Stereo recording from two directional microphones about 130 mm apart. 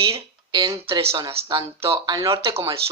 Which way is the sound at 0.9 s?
45° right (ahead or behind).